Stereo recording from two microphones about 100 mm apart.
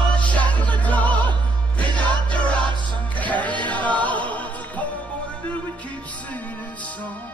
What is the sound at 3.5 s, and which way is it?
Chant, 50° right (ahead or behind).